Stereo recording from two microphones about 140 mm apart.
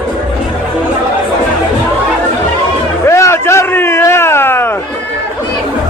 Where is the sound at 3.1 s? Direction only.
20° left (ahead or behind).